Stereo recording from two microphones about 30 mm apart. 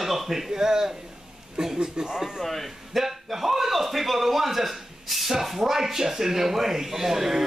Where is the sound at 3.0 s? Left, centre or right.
Centre.